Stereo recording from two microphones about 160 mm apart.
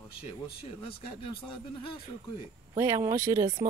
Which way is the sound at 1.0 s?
30° left (ahead or behind).